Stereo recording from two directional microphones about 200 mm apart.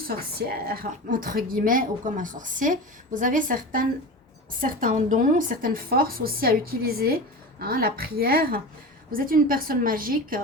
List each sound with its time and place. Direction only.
0.1 s a woman's voice: 50° right (ahead or behind)